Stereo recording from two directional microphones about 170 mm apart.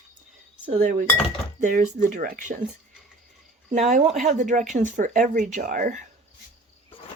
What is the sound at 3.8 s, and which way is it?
Speech, 40° right (ahead or behind).